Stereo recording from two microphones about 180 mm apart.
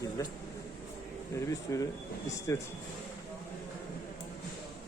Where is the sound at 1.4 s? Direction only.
15° left (ahead or behind).